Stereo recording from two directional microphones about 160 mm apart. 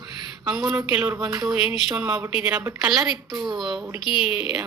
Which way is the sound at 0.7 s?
20° right (ahead or behind).